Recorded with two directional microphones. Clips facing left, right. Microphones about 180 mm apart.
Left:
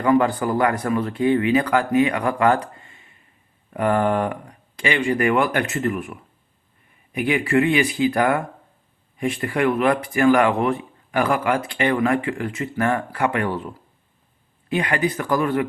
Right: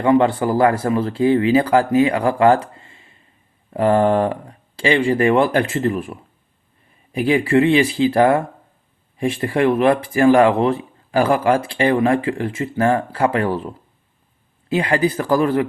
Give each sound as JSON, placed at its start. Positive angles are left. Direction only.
{"t": 0.0, "sound": "speech", "side_deg": -25}